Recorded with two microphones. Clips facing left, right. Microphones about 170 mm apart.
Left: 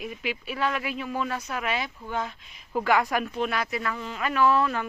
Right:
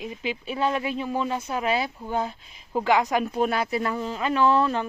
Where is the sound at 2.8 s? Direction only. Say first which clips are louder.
Right 2 dB; 20° right (ahead or behind).